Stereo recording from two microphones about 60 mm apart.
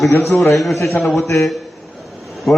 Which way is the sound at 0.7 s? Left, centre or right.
Left.